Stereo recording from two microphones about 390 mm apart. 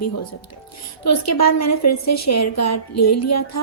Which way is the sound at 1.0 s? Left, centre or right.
Left.